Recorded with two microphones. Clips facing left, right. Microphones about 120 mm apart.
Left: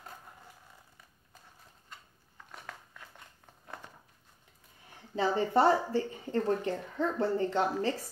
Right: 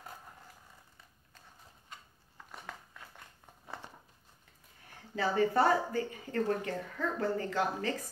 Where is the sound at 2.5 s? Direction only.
5° right (ahead or behind).